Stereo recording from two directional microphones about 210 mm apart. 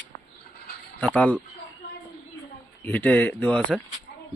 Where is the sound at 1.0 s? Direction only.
5° left (ahead or behind).